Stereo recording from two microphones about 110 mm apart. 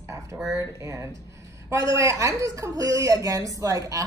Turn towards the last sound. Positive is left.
turn(degrees=-30)  # may be behind; listen again after turning